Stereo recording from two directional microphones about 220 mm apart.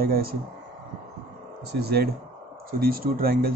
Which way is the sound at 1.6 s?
45° right (ahead or behind).